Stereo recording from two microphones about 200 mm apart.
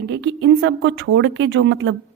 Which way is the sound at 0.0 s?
60° right (ahead or behind).